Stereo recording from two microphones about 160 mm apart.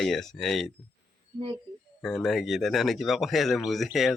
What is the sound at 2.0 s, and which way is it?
Speech, centre (ahead or behind).